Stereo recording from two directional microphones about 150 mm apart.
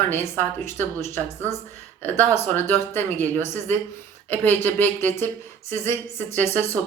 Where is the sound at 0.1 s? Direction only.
15° left (ahead or behind).